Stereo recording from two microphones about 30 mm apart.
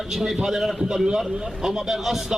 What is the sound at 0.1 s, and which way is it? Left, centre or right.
A man's voice, centre.